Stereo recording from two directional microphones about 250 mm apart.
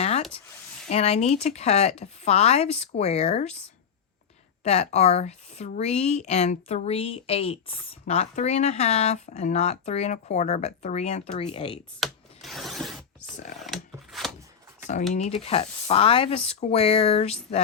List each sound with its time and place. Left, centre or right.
0.0 s a sound: left
0.9 s a woman's voice: left
4.6 s a woman's voice: left
11.9 s rub: centre
13.6 s filing: centre
15.1 s a woman's voice: left